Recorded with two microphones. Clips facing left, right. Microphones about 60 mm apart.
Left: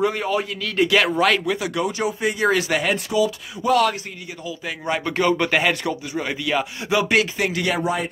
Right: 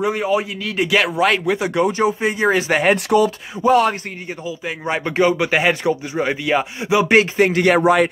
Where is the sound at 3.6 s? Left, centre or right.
Right.